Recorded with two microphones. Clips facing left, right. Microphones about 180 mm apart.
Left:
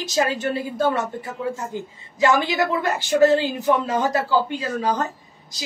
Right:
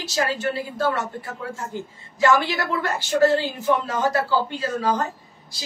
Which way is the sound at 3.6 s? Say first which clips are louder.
Left 1 dB; 15° left (ahead or behind).